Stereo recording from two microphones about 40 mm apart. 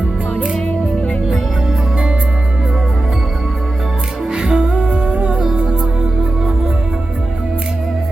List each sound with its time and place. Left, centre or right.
0.7 s music: left
4.3 s music: centre
4.8 s humming: right
5.5 s music: right